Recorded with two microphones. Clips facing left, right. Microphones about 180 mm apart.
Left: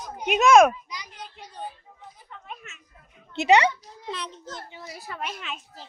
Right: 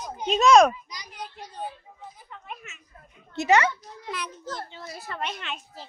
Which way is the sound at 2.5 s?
Centre (ahead or behind).